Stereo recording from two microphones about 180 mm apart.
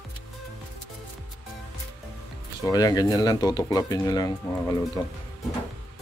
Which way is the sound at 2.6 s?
20° left (ahead or behind).